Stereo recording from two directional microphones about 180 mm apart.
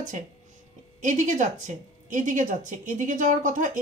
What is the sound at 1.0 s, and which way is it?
Speech, 45° right (ahead or behind).